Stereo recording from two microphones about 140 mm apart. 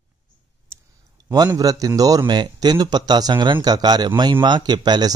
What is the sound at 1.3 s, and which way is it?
Speech, 30° right (ahead or behind).